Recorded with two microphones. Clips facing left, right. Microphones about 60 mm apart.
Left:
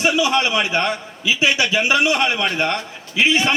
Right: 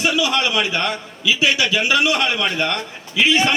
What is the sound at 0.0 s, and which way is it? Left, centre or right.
A man's voice, left.